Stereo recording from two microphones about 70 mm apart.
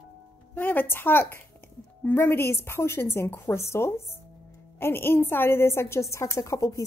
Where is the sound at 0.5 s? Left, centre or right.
Left.